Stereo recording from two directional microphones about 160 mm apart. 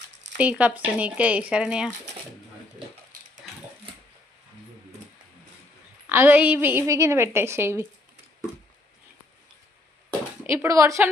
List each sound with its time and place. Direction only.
0.3 s a woman's voice: 10° right (ahead or behind)
6.1 s a woman's voice: 15° right (ahead or behind)
10.5 s a woman's voice: 20° right (ahead or behind)